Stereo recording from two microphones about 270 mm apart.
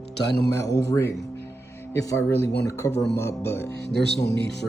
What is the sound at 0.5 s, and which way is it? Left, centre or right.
A man's voice, centre.